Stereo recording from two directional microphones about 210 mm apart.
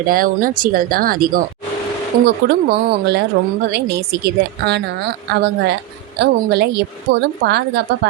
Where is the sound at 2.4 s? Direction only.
50° right (ahead or behind).